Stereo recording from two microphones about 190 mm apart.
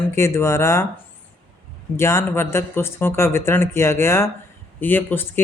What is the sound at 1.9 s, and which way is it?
Speech, 15° left (ahead or behind).